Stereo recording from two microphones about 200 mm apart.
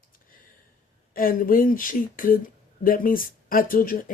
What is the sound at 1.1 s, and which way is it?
Speech, 45° left (ahead or behind).